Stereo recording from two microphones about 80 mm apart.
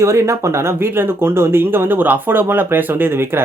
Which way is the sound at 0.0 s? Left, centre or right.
Right.